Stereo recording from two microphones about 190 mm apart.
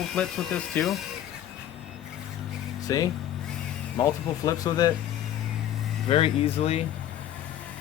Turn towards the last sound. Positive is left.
turn(degrees=35)  # may be behind; listen again after turning